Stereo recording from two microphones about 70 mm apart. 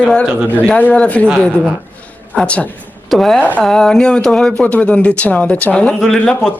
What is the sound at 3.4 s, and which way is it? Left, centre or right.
Speech, left.